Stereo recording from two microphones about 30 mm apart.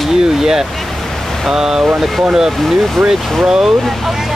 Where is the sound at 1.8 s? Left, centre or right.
Centre.